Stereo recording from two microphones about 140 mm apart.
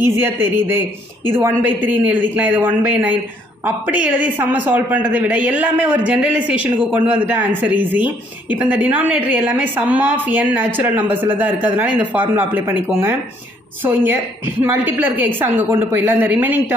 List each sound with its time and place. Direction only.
0.0 s speech: 15° right (ahead or behind)